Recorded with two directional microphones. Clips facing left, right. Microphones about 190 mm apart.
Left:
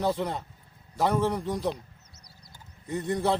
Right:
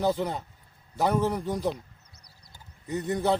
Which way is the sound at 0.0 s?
5° right (ahead or behind).